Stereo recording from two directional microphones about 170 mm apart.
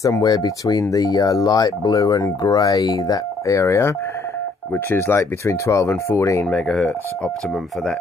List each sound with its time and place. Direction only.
0.0 s speech: 20° left (ahead or behind)
6.4 s speech: 5° left (ahead or behind)